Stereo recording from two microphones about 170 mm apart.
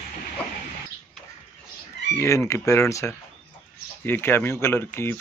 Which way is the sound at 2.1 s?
15° left (ahead or behind).